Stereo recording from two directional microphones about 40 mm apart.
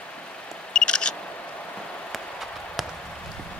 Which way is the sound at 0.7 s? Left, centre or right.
Left.